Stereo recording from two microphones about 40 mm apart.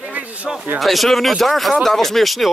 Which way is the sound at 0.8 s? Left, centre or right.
Centre.